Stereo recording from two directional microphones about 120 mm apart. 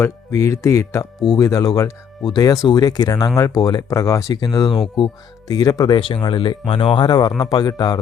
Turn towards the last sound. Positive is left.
turn(degrees=30)  # may be behind; listen again after turning